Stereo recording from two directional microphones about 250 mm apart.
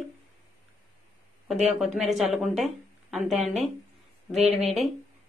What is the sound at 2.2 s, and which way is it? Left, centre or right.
Speech, centre.